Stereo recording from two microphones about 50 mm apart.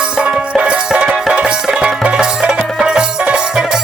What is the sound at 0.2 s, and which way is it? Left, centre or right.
Music, centre.